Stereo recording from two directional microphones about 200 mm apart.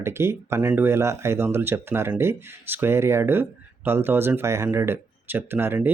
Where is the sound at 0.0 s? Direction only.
10° right (ahead or behind).